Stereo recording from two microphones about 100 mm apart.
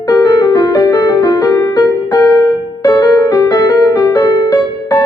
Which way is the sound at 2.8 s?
35° left (ahead or behind).